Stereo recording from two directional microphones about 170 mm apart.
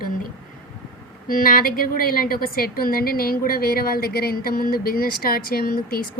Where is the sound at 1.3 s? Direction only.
55° left (ahead or behind).